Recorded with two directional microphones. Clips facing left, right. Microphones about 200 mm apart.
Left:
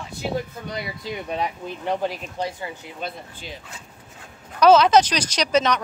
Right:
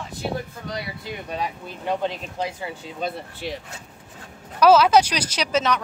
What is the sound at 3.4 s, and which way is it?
Speech, 70° right (ahead or behind).